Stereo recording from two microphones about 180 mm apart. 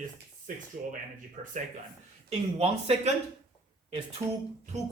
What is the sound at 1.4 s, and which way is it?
Speech, 40° right (ahead or behind).